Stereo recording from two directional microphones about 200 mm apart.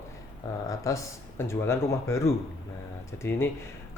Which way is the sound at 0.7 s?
15° left (ahead or behind).